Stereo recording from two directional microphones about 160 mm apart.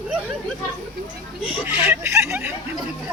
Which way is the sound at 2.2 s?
10° right (ahead or behind).